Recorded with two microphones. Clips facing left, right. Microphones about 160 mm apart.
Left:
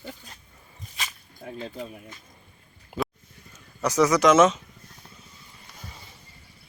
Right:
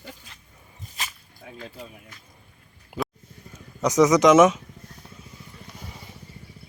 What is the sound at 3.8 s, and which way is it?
Speech, 20° right (ahead or behind).